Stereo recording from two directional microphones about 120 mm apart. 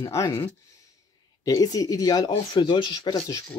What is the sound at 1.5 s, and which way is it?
Speech, 30° left (ahead or behind).